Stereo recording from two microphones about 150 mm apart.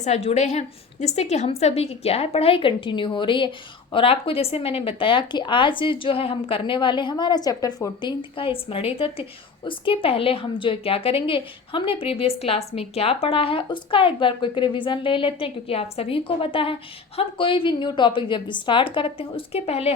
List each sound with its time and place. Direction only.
0.0 s a woman's voice: 45° left (ahead or behind); by 8.1 s 25° left (ahead or behind)
8.4 s a woman's voice: 40° left (ahead or behind)